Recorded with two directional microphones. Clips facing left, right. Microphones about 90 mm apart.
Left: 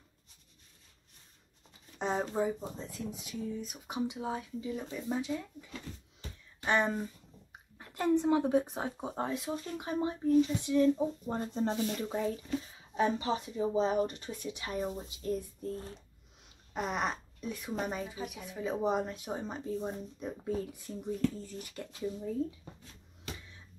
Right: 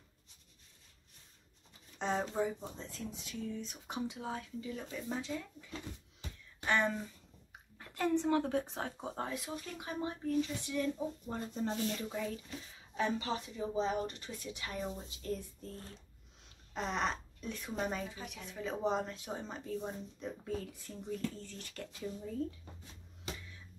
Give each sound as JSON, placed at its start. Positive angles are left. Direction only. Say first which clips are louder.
{"t": 2.0, "sound": "speech", "louder": "left 2 dB", "side_deg": 15}
{"t": 12.9, "sound": "speech", "louder": "left 5 dB", "side_deg": 20}
{"t": 16.7, "sound": "speech", "louder": "left 2 dB", "side_deg": 10}